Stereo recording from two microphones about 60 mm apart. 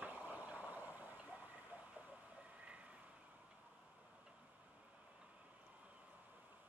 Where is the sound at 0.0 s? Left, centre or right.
Right.